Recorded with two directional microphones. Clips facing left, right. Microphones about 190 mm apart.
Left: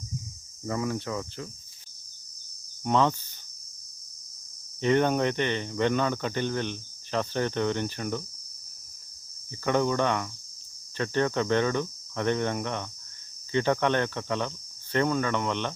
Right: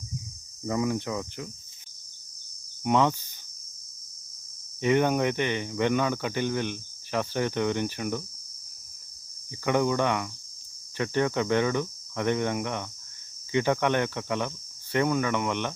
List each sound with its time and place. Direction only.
0.6 s cricket: 15° right (ahead or behind)
2.8 s cricket: 15° right (ahead or behind)
4.8 s cricket: 10° right (ahead or behind)
9.6 s cricket: 15° right (ahead or behind)